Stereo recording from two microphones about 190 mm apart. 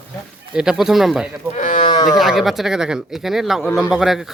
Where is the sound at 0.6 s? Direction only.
5° right (ahead or behind).